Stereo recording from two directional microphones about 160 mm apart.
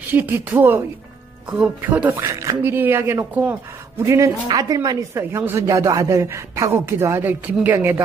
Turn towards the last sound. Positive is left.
turn(degrees=-15)  # may be behind; listen again after turning